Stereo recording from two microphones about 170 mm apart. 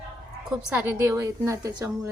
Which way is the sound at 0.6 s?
5° right (ahead or behind).